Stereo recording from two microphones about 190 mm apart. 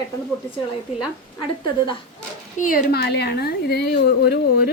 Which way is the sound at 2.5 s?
45° left (ahead or behind).